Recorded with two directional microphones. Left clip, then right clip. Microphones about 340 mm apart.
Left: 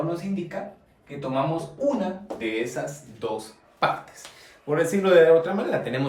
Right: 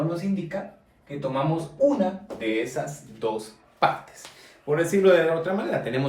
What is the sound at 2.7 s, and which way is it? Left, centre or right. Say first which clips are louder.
Speech: even; centre.